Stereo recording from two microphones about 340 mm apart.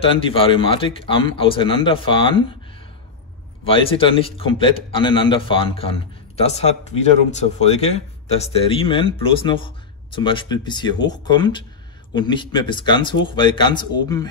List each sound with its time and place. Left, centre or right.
0.0 s a man's voice: centre
3.6 s a man's voice: centre